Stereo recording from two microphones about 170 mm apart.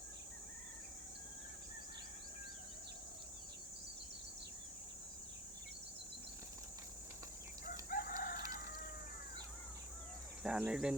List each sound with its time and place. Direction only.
7.9 s chicken: 55° left (ahead or behind)
10.4 s speech: 5° right (ahead or behind)